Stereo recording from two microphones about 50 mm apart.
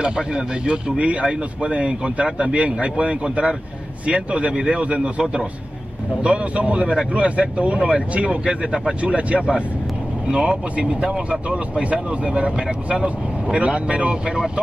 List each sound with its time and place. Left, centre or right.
0.0 s speech: centre
8.5 s speech: centre
9.0 s speech: right